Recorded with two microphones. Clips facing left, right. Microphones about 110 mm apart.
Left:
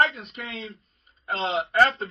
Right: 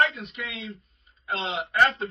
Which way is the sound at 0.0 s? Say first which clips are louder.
Left 1 dB; 40° left (ahead or behind).